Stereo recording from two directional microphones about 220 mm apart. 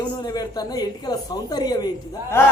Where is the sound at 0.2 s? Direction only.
15° left (ahead or behind).